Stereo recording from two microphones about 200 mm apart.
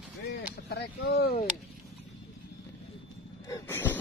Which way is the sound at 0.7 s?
55° left (ahead or behind).